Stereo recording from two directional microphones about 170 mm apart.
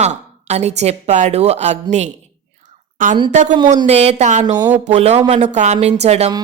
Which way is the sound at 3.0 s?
50° right (ahead or behind).